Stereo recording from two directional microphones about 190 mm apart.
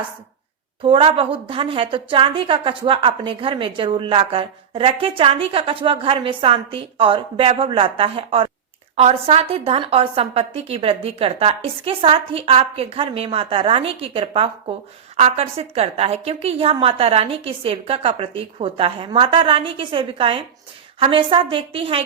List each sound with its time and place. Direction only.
0.8 s a woman's voice: 30° right (ahead or behind)